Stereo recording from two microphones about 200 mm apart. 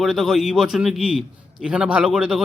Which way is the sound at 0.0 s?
Centre (ahead or behind).